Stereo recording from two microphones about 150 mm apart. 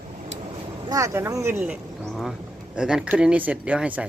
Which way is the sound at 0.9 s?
20° right (ahead or behind).